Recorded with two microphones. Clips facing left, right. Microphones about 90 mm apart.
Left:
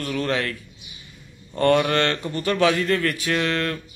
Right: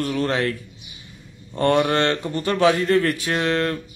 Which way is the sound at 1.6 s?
25° right (ahead or behind).